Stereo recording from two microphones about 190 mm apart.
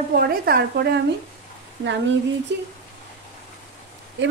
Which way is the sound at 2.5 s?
70° right (ahead or behind).